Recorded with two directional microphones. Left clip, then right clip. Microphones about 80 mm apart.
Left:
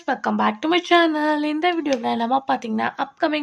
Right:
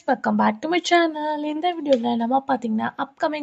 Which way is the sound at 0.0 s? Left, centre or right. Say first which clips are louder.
Right 1 dB; right.